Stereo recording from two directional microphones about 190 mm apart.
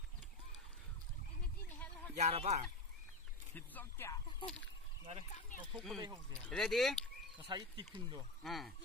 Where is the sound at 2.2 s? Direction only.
35° right (ahead or behind).